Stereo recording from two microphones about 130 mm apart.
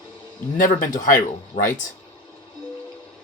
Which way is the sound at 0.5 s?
90° left.